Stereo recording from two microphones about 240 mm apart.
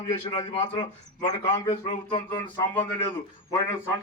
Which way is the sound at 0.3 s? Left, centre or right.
Left.